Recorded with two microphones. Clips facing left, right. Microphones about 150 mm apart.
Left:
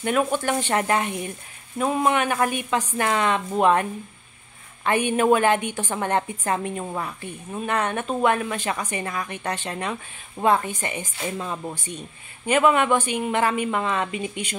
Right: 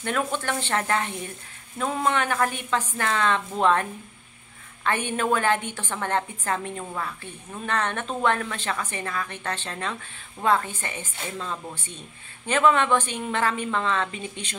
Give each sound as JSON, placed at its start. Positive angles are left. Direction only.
{"t": 0.0, "sound": "a woman's voice", "side_deg": 15}
{"t": 4.8, "sound": "a woman's voice", "side_deg": 15}